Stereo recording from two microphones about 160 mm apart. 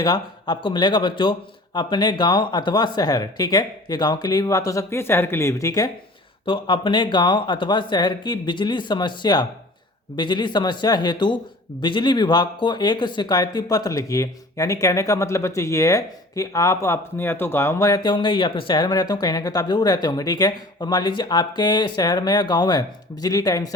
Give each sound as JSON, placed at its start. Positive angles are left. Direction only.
{"t": 0.0, "sound": "speech", "side_deg": 25}